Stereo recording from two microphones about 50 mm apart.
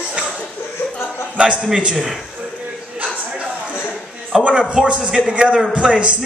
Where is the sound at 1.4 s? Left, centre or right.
Right.